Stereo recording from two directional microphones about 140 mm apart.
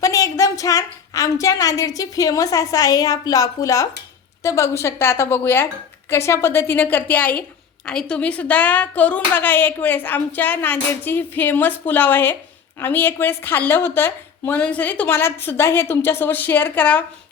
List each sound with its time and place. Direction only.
0.0 s a woman's voice: 25° left (ahead or behind)